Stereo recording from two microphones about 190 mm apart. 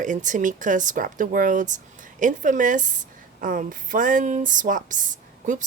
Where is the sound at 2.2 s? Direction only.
40° right (ahead or behind).